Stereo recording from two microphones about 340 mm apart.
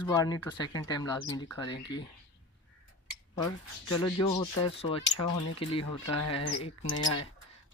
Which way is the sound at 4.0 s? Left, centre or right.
Centre.